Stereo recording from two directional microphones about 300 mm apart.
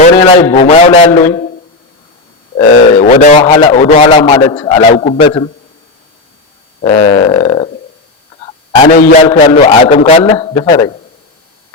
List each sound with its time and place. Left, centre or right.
0.5 s a man's voice: centre
2.6 s a man's voice: left
6.8 s speech: centre
8.7 s a man's voice: left